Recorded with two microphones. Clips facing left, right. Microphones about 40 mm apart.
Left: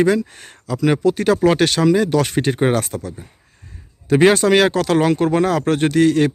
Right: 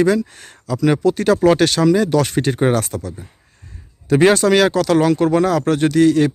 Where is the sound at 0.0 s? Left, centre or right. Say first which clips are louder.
Even; left.